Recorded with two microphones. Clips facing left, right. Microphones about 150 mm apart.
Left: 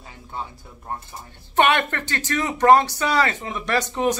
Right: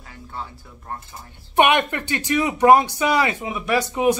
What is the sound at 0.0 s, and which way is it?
Speech, 20° left (ahead or behind).